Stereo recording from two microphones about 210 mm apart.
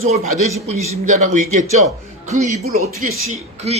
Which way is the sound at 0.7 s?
35° right (ahead or behind).